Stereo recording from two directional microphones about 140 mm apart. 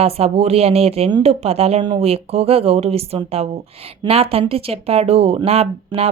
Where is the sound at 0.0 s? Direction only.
45° right (ahead or behind).